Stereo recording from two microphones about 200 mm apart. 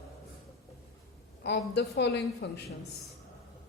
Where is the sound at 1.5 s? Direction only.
60° left (ahead or behind).